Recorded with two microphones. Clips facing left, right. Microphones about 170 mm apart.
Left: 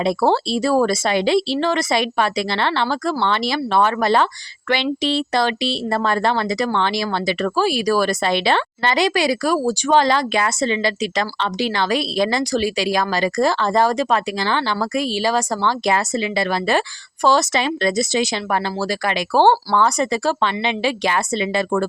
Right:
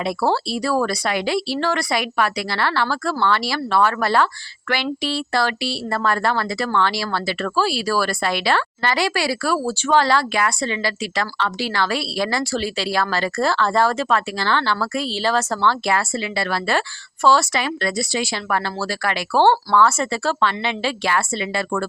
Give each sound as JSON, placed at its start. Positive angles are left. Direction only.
{"t": 0.0, "sound": "speech", "side_deg": 25}